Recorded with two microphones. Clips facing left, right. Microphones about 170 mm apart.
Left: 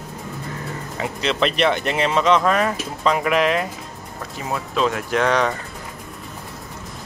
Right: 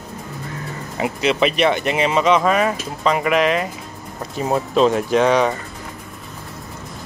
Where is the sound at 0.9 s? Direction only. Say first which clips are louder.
Right 4 dB; 10° right (ahead or behind).